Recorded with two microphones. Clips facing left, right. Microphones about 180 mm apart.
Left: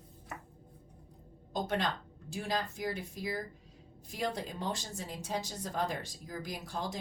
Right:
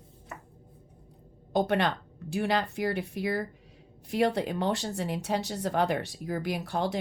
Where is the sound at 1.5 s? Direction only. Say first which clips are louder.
Right 8 dB; 65° right (ahead or behind).